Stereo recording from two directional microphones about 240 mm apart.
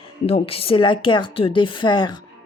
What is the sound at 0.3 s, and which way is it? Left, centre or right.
A woman's voice, left.